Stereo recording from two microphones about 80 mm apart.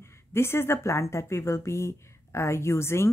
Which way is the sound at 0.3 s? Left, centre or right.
Left.